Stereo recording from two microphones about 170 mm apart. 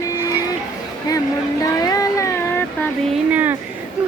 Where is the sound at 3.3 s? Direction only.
10° right (ahead or behind).